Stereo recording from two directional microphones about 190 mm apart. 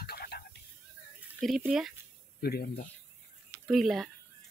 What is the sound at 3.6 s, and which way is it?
Speech, centre (ahead or behind).